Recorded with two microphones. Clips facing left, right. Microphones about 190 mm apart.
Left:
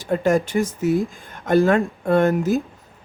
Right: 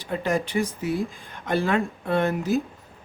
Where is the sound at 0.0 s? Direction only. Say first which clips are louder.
Left 7 dB; 45° left (ahead or behind).